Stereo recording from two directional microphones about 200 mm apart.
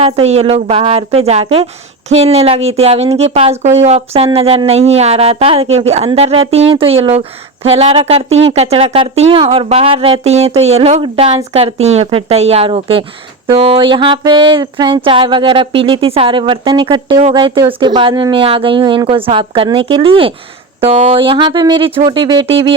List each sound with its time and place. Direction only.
0.0 s speech: 30° right (ahead or behind)